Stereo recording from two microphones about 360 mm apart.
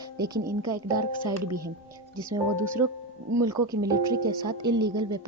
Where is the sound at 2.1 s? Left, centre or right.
Centre.